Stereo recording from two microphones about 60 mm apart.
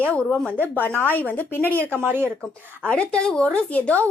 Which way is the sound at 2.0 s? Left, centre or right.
Right.